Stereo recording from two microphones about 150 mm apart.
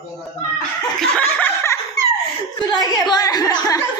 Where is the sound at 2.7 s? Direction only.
25° left (ahead or behind).